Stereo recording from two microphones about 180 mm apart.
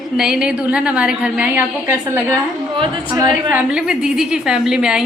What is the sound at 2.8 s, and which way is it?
Speech, 25° right (ahead or behind).